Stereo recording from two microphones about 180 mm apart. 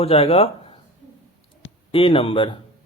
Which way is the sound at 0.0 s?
35° left (ahead or behind).